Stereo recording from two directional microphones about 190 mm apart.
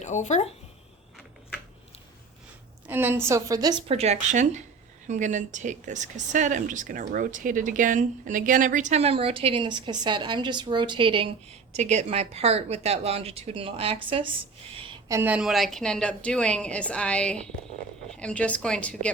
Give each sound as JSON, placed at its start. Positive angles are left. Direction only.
{"t": 0.0, "sound": "speech", "side_deg": 40}
{"t": 2.8, "sound": "a woman's voice", "side_deg": -10}
{"t": 11.7, "sound": "speech", "side_deg": -35}
{"t": 15.1, "sound": "a woman's voice", "side_deg": -10}